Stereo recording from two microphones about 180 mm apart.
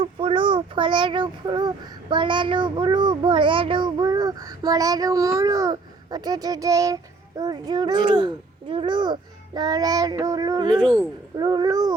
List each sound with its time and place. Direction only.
0.0 s speech: 30° right (ahead or behind)
8.7 s child singing: 25° right (ahead or behind)